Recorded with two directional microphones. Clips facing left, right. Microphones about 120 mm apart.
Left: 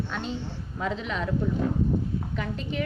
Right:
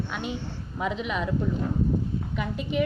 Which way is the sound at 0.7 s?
15° right (ahead or behind).